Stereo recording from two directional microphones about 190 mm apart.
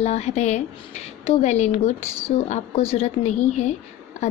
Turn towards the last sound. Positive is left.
turn(degrees=35)  # may be behind; listen again after turning